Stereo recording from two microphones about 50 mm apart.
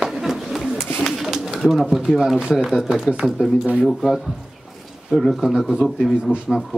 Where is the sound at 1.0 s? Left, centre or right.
Centre.